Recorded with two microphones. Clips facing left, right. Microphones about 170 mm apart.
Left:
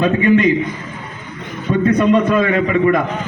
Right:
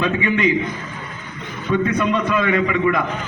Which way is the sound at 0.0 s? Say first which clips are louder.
Left 6 dB; 45° left (ahead or behind).